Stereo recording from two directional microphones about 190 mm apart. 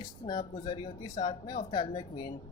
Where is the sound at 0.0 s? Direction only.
25° left (ahead or behind).